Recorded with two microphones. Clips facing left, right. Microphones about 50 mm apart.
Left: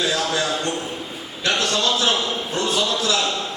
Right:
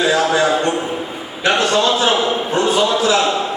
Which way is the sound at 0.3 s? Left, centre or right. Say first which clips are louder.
Right 8 dB; centre.